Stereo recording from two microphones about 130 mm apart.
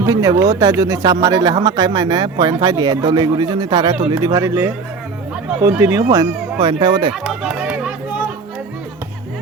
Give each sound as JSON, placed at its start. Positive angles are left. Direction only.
{"t": 0.0, "sound": "speech", "side_deg": -25}
{"t": 5.8, "sound": "speech", "side_deg": -25}
{"t": 7.1, "sound": "a sound", "side_deg": -5}